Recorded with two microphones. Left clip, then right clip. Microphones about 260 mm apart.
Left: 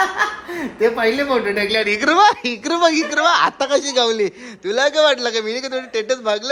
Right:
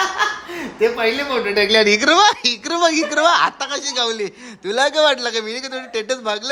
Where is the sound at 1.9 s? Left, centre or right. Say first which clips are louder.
Even; centre.